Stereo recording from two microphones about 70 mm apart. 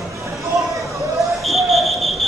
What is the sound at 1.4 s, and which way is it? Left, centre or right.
Fire alarm, centre.